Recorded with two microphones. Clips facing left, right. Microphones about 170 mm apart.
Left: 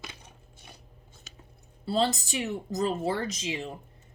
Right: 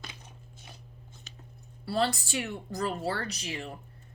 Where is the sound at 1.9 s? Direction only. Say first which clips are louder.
Left 2 dB; 20° left (ahead or behind).